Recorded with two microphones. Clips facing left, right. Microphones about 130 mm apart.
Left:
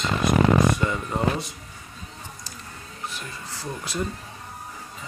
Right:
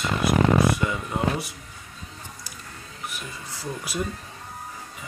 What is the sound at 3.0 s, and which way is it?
Music, 15° right (ahead or behind).